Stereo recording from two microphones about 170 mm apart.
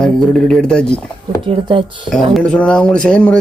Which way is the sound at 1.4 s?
30° right (ahead or behind).